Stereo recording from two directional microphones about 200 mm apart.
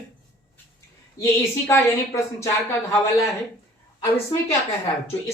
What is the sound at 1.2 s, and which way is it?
Speech, 15° left (ahead or behind).